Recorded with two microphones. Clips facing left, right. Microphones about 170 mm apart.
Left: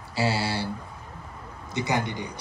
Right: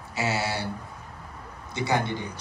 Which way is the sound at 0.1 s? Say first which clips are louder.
Left 2 dB; 30° left (ahead or behind).